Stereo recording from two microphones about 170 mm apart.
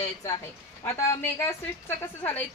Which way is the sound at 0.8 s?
15° left (ahead or behind).